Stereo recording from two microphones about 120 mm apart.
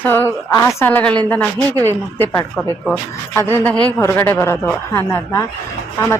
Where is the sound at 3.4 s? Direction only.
20° left (ahead or behind).